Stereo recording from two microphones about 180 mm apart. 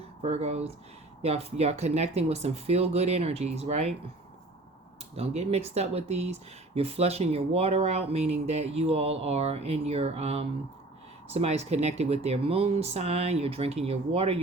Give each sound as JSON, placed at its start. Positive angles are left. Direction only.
{"t": 0.2, "sound": "speech", "side_deg": -35}
{"t": 5.1, "sound": "speech", "side_deg": -35}